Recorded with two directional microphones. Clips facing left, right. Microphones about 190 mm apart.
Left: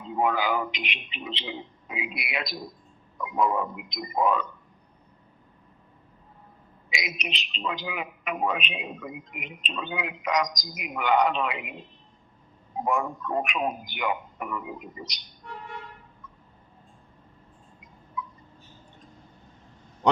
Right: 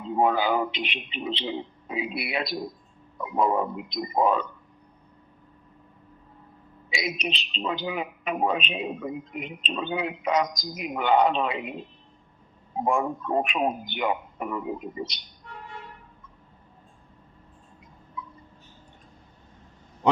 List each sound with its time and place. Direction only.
0.2 s speech: 30° right (ahead or behind)
6.9 s speech: 30° right (ahead or behind)
12.8 s a man's voice: 25° right (ahead or behind)
18.2 s a sound: 30° right (ahead or behind)